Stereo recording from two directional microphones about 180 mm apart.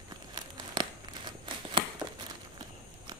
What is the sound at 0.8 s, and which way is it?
Crumpling, 25° right (ahead or behind).